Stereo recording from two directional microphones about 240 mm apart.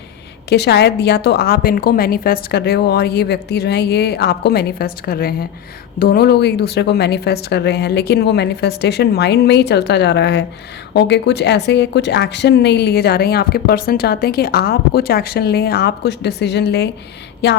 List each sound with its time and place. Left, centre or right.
0.5 s a woman's voice: left